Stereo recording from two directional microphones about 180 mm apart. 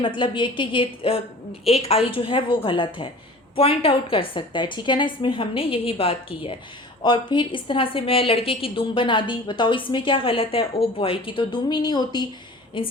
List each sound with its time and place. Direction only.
0.0 s a woman's voice: 25° left (ahead or behind)